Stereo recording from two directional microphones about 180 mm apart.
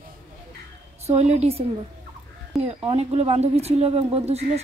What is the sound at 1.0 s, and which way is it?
Speech, 35° right (ahead or behind).